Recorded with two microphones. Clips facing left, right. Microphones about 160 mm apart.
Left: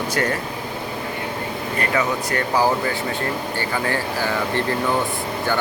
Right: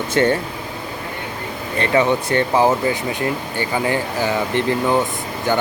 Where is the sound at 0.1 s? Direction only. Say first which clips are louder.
Right 8 dB; 25° right (ahead or behind).